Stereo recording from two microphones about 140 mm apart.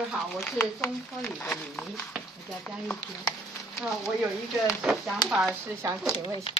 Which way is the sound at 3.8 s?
5° right (ahead or behind).